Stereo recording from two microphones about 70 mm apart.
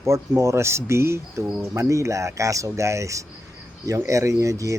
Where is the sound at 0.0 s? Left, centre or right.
Right.